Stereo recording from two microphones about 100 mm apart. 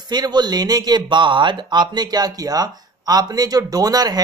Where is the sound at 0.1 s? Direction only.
45° right (ahead or behind).